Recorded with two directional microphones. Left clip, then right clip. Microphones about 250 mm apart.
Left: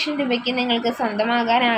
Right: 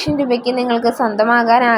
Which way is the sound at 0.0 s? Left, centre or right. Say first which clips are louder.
Right 5 dB; centre.